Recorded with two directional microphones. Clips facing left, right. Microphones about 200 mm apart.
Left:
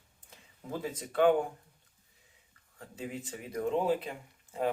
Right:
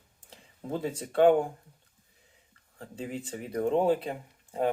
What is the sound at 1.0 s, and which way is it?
Speech, 30° right (ahead or behind).